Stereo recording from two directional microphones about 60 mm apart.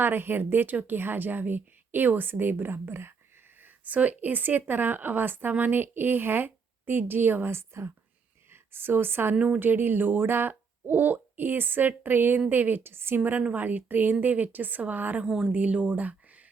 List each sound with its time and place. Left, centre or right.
0.0 s speech: right
3.6 s speech: right
9.3 s speech: centre
9.6 s speech: right
15.2 s a woman's voice: centre
15.4 s speech: right